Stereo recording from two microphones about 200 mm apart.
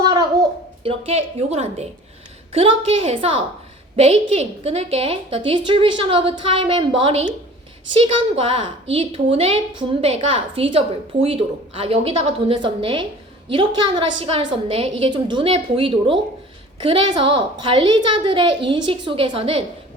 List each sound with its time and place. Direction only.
0.9 s a woman's voice: 30° right (ahead or behind)